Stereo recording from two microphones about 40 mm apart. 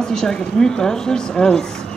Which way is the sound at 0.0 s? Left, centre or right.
Centre.